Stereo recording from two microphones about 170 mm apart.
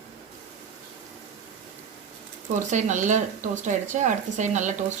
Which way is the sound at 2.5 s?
45° right (ahead or behind).